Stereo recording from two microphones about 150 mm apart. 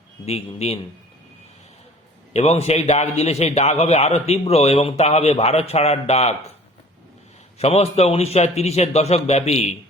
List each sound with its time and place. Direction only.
0.3 s a man's voice: 45° left (ahead or behind)
2.3 s a man's voice: 45° left (ahead or behind)
7.6 s a man's voice: 45° left (ahead or behind)